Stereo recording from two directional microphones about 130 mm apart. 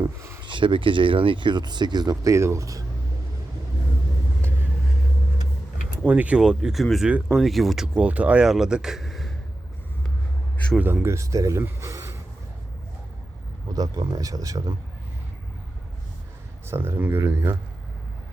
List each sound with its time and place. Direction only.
0.0 s a sound: 20° right (ahead or behind)
0.4 s speech: 40° right (ahead or behind)
6.1 s speech: 10° right (ahead or behind)
10.8 s speech: 15° right (ahead or behind)
13.7 s speech: 30° right (ahead or behind)
16.6 s speech: 20° right (ahead or behind)